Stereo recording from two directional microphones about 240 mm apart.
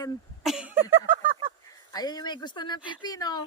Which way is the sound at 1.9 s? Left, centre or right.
Centre.